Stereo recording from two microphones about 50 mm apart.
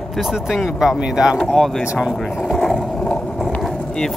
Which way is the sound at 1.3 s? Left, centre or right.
Centre.